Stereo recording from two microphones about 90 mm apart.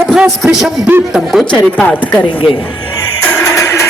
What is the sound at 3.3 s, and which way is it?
Music, 30° left (ahead or behind).